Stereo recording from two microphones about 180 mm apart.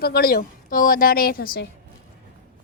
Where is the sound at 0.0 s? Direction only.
60° left (ahead or behind).